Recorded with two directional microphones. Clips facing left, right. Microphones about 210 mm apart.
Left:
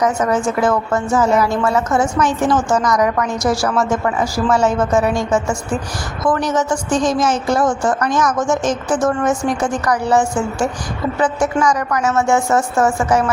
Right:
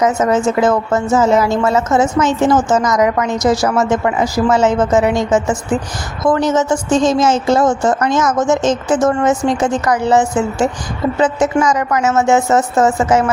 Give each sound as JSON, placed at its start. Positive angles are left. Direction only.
{"t": 0.0, "sound": "a woman's voice", "side_deg": -20}